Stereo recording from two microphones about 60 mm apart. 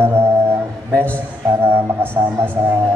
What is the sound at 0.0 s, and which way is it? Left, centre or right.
Music, right.